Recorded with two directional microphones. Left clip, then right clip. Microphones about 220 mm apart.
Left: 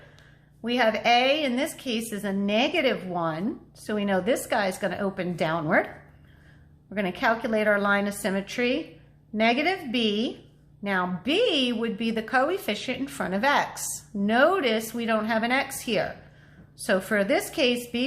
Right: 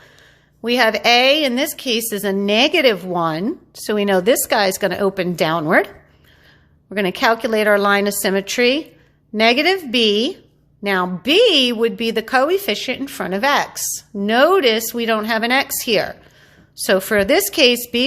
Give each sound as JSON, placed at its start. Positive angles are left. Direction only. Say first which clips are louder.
{"t": 0.6, "sound": "a woman's voice", "louder": "right 8 dB", "side_deg": -45}
{"t": 6.9, "sound": "a woman's voice", "louder": "right 8 dB", "side_deg": -45}